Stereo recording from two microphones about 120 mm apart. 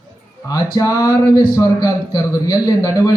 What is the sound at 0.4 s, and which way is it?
Speech, 30° left (ahead or behind).